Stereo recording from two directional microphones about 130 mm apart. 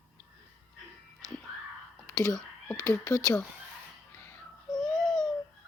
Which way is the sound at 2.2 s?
25° left (ahead or behind).